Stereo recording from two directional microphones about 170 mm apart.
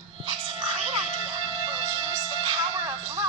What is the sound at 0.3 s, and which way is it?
Music, 35° right (ahead or behind).